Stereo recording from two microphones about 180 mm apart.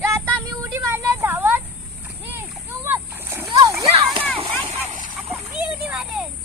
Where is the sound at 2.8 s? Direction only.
10° right (ahead or behind).